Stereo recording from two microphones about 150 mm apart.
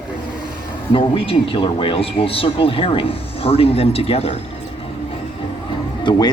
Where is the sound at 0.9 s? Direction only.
35° left (ahead or behind).